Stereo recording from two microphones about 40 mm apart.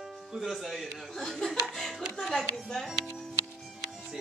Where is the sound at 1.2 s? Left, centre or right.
Centre.